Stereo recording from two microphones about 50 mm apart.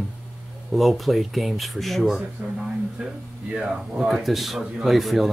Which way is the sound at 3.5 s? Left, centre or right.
Centre.